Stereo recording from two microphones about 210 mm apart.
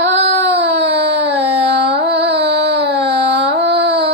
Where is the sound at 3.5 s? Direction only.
55° right (ahead or behind).